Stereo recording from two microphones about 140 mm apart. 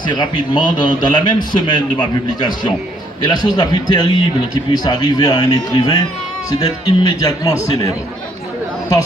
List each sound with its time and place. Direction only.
0.1 s a man's voice: 35° left (ahead or behind)